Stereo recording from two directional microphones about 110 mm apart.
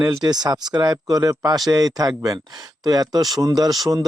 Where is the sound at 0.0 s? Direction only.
40° right (ahead or behind).